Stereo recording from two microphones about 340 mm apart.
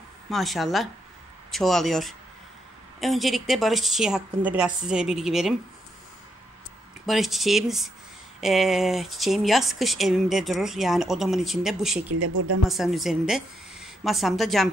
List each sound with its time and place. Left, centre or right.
0.3 s speech: centre
7.1 s speech: centre
12.1 s speech: right
12.6 s speech: centre